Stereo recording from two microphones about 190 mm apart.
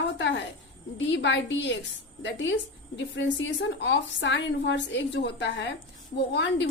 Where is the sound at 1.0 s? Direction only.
70° left (ahead or behind).